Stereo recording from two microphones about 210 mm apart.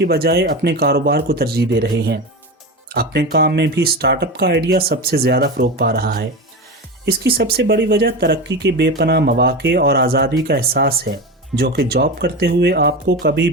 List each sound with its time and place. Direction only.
0.0 s speech: 50° right (ahead or behind)